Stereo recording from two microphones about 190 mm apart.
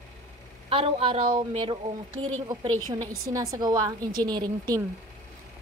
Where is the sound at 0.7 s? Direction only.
30° right (ahead or behind).